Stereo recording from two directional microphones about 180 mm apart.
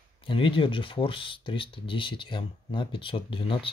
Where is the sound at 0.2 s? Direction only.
30° left (ahead or behind).